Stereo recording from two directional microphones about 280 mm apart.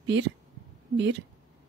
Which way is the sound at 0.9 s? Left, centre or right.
Right.